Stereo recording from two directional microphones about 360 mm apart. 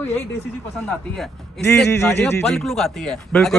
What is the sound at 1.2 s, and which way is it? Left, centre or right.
A man's voice, centre.